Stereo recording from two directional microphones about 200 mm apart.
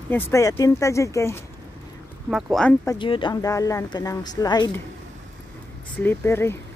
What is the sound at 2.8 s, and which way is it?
Speech, 20° left (ahead or behind).